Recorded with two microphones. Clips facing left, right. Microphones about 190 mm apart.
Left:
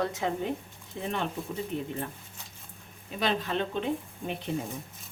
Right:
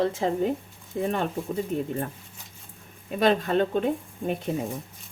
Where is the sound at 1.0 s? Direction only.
45° right (ahead or behind).